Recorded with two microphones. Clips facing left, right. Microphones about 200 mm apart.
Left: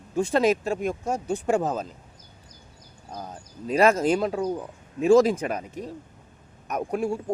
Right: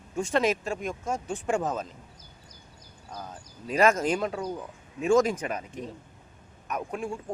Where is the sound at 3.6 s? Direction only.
35° left (ahead or behind).